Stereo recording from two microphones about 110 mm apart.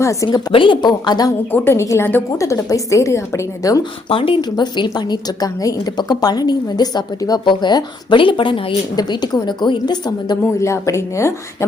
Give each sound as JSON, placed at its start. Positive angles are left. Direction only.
{"t": 0.0, "sound": "a woman's voice", "side_deg": 30}
{"t": 0.3, "sound": "a woman's voice", "side_deg": 50}
{"t": 1.5, "sound": "a woman's voice", "side_deg": 25}
{"t": 4.1, "sound": "a woman's voice", "side_deg": 55}
{"t": 9.0, "sound": "a woman's voice", "side_deg": 40}
{"t": 10.4, "sound": "a woman's voice", "side_deg": 25}